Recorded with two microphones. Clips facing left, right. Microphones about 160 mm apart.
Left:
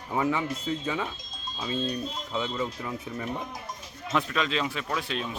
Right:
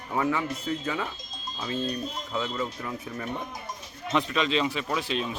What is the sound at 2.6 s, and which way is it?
Speech, 5° left (ahead or behind).